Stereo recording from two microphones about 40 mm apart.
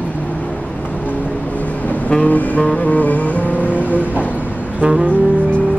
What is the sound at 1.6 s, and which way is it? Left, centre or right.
Vehicle, left.